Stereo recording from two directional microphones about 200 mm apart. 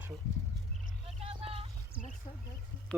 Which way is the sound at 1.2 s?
30° right (ahead or behind).